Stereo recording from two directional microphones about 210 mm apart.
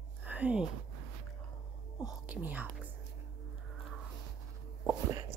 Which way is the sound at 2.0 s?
5° right (ahead or behind).